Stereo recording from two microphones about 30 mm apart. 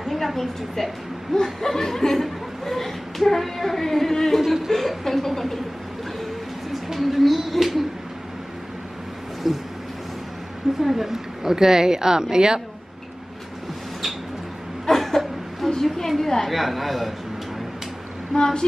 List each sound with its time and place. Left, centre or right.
0.0 s a woman's voice: centre
1.3 s speech: centre
6.7 s a sound: centre
9.5 s speech: centre
10.8 s a woman's voice: centre; by 12.6 s right
14.9 s a sound: centre
16.5 s speech: centre
18.3 s speech: left